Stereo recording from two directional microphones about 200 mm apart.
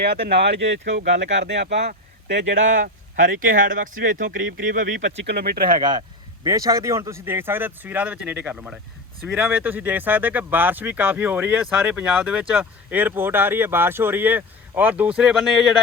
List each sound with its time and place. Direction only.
0.0 s speech: 50° right (ahead or behind)
2.6 s speech: 40° right (ahead or behind)
4.9 s speech: 65° right (ahead or behind); by 5.8 s 45° right (ahead or behind)
6.4 s speech: 15° right (ahead or behind); by 15.8 s centre (ahead or behind)